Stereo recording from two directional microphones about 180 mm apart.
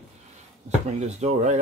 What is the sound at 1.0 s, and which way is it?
Speech, 40° right (ahead or behind).